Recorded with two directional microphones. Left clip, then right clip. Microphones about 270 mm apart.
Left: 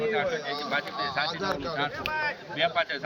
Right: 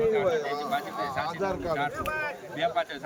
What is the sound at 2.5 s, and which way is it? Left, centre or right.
Speech, centre.